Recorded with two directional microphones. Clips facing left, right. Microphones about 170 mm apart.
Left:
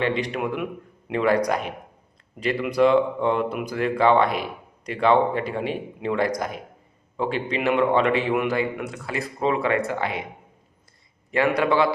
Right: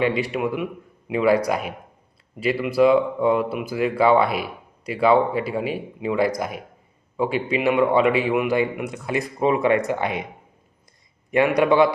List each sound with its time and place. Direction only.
0.0 s speech: 10° right (ahead or behind)
11.3 s speech: 15° right (ahead or behind)